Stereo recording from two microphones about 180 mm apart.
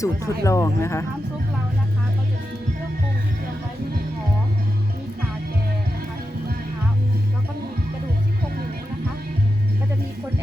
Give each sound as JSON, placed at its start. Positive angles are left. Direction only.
{"t": 0.0, "sound": "speech", "side_deg": 15}